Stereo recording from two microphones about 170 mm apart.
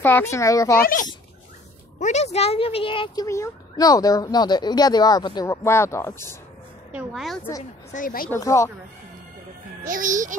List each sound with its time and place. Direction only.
0.0 s speech: 15° left (ahead or behind)
0.7 s speech: 60° left (ahead or behind)
2.0 s speech: 45° left (ahead or behind)
3.3 s speech: 20° left (ahead or behind)
6.9 s a woman's voice: 5° right (ahead or behind)
7.9 s speech: 55° left (ahead or behind)
8.3 s speech: 20° left (ahead or behind)
9.8 s a child's voice: 50° right (ahead or behind)